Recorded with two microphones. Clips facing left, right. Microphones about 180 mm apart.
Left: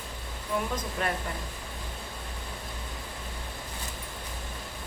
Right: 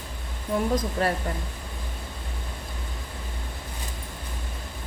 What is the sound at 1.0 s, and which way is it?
Speech, 35° right (ahead or behind).